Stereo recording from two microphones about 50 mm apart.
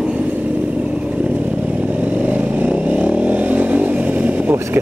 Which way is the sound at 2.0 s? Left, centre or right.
Right.